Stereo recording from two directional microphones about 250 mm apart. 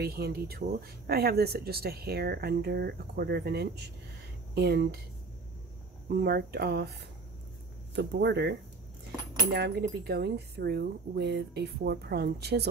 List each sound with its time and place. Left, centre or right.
0.0 s speech: right
6.2 s speech: right
7.9 s speech: right